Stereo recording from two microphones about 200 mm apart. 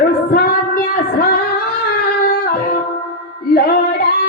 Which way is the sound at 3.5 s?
50° left (ahead or behind).